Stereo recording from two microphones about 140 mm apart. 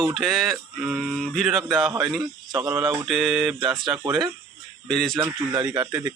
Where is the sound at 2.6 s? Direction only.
15° right (ahead or behind).